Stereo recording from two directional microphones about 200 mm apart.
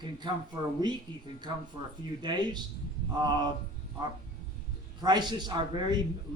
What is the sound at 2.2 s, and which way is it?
A man's voice, 20° right (ahead or behind).